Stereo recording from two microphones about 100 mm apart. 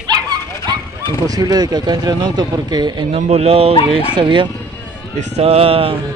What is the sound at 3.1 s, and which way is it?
Speech, 90° right.